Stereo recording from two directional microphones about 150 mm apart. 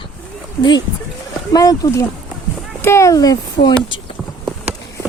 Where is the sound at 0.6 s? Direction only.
30° left (ahead or behind).